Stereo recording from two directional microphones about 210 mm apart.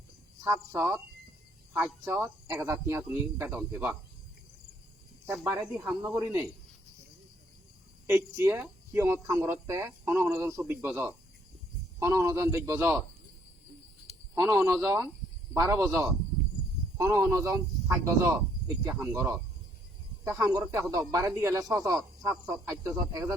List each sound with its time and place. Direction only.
0.4 s speech: 10° right (ahead or behind)
5.2 s speech: 10° right (ahead or behind)
8.0 s speech: 10° right (ahead or behind)
14.3 s speech: 10° right (ahead or behind)